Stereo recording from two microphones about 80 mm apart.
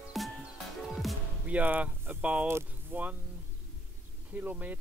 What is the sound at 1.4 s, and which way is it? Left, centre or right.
Speech, centre.